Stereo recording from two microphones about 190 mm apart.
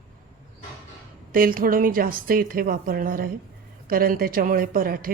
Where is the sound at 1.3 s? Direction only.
50° right (ahead or behind).